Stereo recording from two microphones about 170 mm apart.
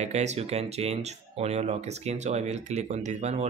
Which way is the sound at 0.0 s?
40° right (ahead or behind).